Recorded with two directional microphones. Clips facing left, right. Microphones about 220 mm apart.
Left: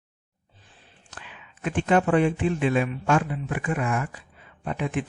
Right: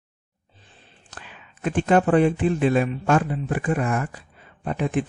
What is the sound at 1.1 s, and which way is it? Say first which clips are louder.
Speech: right 1 dB; 40° right (ahead or behind).